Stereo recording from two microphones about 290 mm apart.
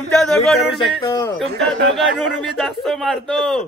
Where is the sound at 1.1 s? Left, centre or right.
Centre.